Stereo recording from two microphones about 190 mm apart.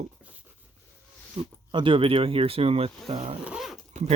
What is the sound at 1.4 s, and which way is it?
Speech, 35° right (ahead or behind).